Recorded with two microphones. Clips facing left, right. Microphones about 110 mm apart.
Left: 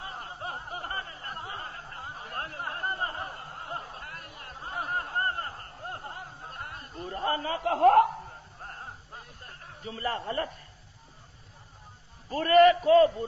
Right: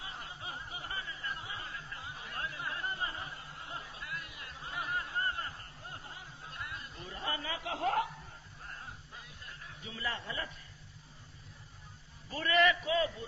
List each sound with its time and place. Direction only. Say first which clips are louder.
0.0 s snicker: left 7 dB; 45° left (ahead or behind)
12.3 s a man's voice: left 10 dB; 45° left (ahead or behind)